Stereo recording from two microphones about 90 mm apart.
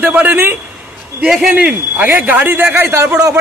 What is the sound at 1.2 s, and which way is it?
Speech, 5° right (ahead or behind).